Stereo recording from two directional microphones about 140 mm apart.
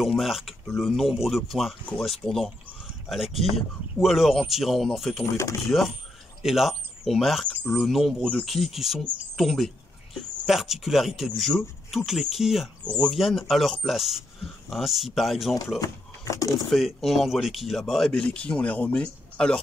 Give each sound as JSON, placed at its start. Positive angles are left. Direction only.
{"t": 0.0, "sound": "speech", "side_deg": 0}
{"t": 15.8, "sound": "speech", "side_deg": 25}
{"t": 16.7, "sound": "speech", "side_deg": 0}